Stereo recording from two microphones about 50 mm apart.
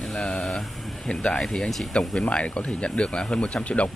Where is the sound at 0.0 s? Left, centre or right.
Centre.